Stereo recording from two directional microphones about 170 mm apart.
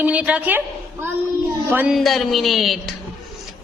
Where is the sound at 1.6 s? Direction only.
10° right (ahead or behind).